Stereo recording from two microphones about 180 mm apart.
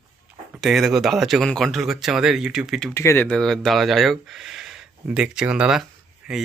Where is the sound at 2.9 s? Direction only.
15° left (ahead or behind).